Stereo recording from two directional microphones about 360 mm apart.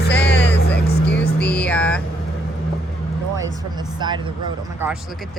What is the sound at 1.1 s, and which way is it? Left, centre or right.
Vehicle, left.